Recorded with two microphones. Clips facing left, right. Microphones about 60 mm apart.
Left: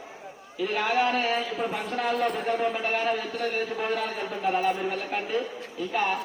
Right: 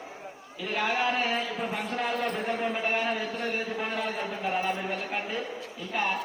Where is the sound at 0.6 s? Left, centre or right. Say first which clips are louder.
Left 3 dB; centre.